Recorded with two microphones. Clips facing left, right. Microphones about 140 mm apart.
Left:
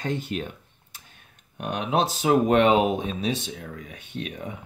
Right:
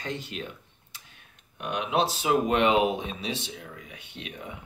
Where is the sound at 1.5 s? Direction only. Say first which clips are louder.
Left 2 dB; 40° left (ahead or behind).